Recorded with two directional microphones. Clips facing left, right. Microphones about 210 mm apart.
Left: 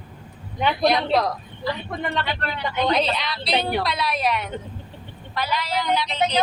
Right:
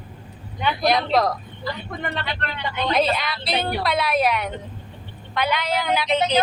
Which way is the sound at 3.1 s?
50° right (ahead or behind).